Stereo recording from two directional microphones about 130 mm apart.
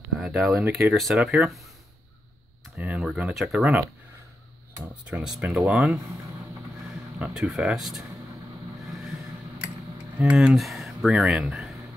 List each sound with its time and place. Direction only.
0.2 s a sound: 5° right (ahead or behind)
0.5 s speech: 15° right (ahead or behind)
0.9 s speech: 5° right (ahead or behind)
2.8 s speech: 10° right (ahead or behind)
5.2 s speech: 5° right (ahead or behind)
7.2 s speech: 10° right (ahead or behind)
10.1 s speech: 10° right (ahead or behind)